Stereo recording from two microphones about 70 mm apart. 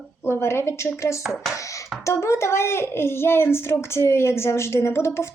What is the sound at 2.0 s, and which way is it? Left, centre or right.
Speech, left.